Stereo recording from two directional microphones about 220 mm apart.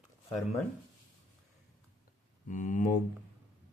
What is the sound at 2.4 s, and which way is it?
Speech, 35° left (ahead or behind).